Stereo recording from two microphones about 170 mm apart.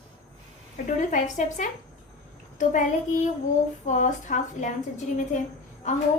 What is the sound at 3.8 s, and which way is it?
Speech, 45° left (ahead or behind).